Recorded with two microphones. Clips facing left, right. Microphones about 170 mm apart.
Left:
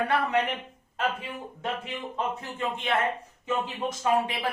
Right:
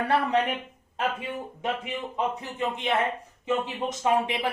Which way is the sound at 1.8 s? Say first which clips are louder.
Right 2 dB; 15° right (ahead or behind).